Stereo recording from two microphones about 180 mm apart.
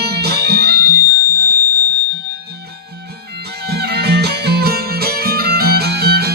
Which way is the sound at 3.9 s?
65° right (ahead or behind).